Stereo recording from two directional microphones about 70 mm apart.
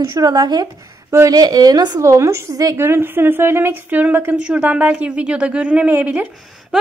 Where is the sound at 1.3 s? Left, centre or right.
Right.